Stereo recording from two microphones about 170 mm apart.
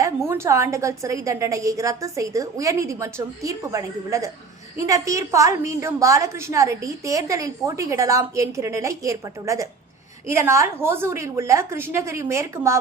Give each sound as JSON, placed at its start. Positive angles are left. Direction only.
{"t": 0.3, "sound": "a woman's voice", "side_deg": -15}